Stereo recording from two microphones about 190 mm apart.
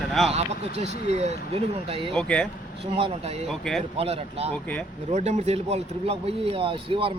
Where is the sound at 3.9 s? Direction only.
30° right (ahead or behind).